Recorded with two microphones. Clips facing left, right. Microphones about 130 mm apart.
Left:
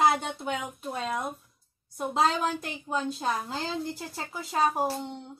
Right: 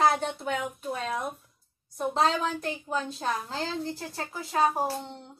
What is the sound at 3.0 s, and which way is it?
A woman's voice, 5° left (ahead or behind).